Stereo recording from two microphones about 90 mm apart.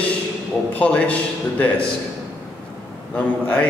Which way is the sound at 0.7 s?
15° left (ahead or behind).